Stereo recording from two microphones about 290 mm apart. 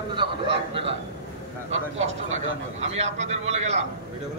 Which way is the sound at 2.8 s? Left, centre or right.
Right.